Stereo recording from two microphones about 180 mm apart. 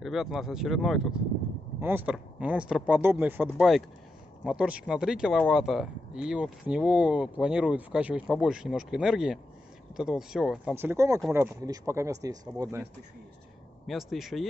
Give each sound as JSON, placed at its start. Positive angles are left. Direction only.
{"t": 0.0, "sound": "speech", "side_deg": 0}
{"t": 13.8, "sound": "speech", "side_deg": 0}